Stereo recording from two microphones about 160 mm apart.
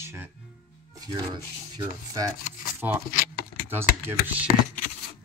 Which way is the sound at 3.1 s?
65° left (ahead or behind).